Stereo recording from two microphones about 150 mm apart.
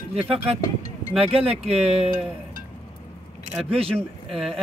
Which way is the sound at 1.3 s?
40° right (ahead or behind).